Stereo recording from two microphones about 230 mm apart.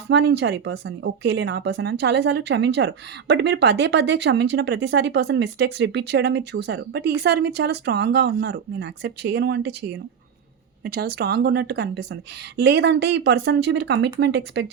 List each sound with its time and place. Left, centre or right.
0.1 s a woman's voice: right